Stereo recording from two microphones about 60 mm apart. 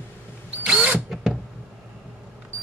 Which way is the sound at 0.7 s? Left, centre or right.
Centre.